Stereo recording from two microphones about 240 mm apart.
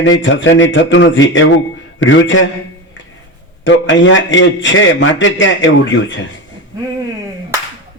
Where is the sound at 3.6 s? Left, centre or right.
Left.